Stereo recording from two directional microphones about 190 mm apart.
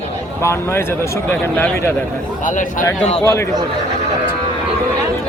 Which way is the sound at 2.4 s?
45° left (ahead or behind).